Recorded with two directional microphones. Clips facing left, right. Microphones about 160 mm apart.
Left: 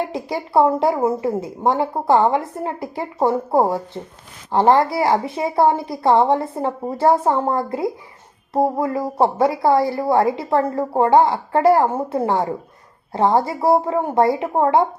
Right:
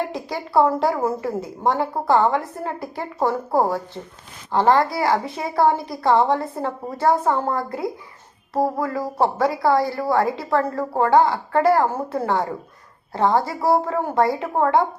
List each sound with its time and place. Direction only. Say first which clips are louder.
0.1 s a woman's voice: left 2 dB; 25° left (ahead or behind)